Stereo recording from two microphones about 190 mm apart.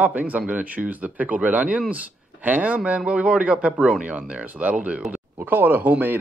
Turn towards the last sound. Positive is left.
turn(degrees=-10)  # may be behind; listen again after turning